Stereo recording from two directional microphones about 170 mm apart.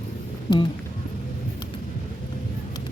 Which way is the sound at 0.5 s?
25° left (ahead or behind).